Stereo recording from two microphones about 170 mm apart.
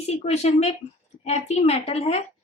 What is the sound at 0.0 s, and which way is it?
A woman's voice, 40° left (ahead or behind).